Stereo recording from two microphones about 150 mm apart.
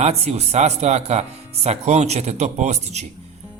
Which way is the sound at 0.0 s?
45° right (ahead or behind).